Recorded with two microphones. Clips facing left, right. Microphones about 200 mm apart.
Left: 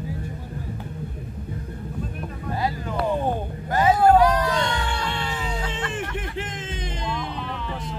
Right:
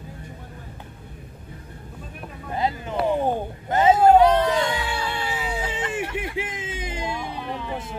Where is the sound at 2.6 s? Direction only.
20° right (ahead or behind).